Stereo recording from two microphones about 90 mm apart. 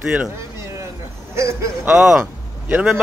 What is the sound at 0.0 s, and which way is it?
Speech, 10° right (ahead or behind).